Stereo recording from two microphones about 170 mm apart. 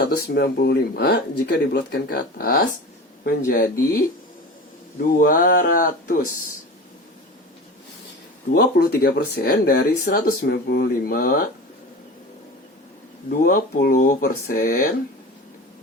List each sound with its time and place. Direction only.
0.3 s speech: 65° left (ahead or behind)
5.0 s speech: 55° left (ahead or behind)
8.5 s speech: 65° left (ahead or behind)
13.4 s speech: 55° left (ahead or behind)